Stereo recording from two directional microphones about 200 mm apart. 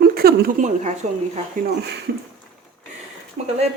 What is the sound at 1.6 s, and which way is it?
Speech, 55° right (ahead or behind).